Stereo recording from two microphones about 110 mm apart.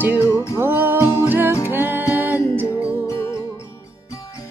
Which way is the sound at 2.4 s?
20° left (ahead or behind).